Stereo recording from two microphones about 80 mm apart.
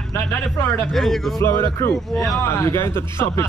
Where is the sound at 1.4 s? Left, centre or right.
Left.